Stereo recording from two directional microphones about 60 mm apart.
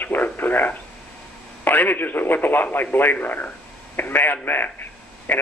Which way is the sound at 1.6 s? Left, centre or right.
Left.